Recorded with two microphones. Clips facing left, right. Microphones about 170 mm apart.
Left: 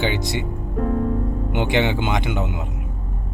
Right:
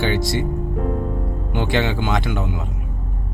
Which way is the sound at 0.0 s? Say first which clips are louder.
Right 2 dB; 20° left (ahead or behind).